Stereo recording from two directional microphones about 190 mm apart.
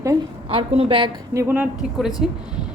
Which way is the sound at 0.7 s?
30° right (ahead or behind).